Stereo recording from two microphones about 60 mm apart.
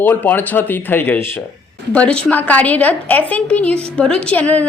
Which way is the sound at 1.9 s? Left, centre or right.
Centre.